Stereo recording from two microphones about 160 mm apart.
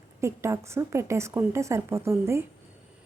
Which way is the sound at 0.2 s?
15° right (ahead or behind).